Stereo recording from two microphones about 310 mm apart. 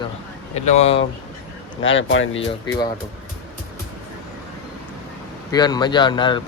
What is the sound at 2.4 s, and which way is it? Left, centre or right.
Speech, centre.